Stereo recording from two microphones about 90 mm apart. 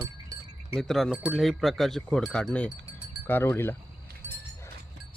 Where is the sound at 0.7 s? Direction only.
5° left (ahead or behind).